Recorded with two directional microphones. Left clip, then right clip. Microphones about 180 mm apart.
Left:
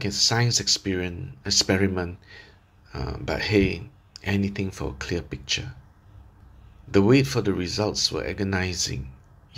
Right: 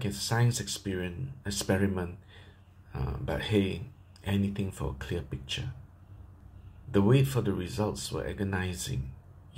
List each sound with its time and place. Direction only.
0.0 s speech: 35° left (ahead or behind)
6.9 s speech: 35° left (ahead or behind)